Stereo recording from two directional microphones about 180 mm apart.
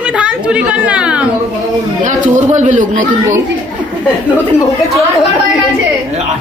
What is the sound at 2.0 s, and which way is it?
A man's voice, 45° right (ahead or behind).